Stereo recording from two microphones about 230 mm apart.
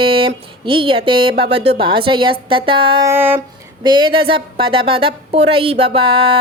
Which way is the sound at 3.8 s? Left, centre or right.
Right.